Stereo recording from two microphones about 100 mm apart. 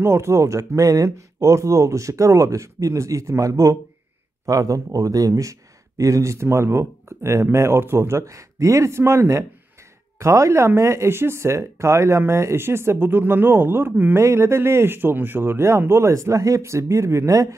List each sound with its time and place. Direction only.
0.0 s speech: 30° right (ahead or behind)